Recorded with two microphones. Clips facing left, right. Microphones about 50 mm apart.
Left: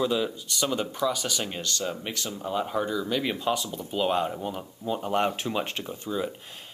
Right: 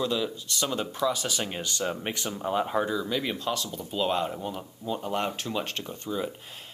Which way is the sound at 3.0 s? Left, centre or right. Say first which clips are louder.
Left 2 dB; centre.